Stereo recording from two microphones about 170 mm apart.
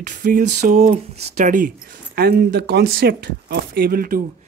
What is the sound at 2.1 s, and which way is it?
Speech, 65° right (ahead or behind).